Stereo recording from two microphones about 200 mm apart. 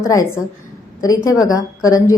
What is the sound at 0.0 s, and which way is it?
A woman's voice, 15° left (ahead or behind).